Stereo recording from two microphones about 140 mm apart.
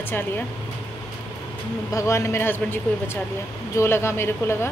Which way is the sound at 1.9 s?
20° left (ahead or behind).